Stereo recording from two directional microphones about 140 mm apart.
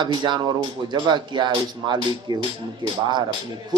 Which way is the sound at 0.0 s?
35° right (ahead or behind).